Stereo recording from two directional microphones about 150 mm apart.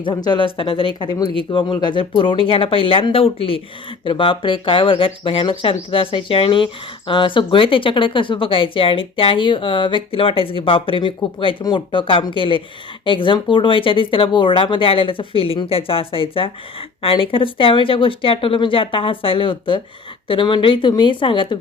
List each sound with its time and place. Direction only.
0.0 s speech: 30° left (ahead or behind)